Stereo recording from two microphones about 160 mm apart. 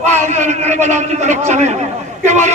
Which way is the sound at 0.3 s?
50° right (ahead or behind).